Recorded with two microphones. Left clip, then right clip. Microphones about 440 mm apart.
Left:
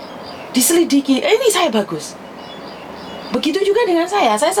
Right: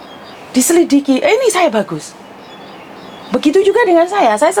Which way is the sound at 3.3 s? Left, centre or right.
Right.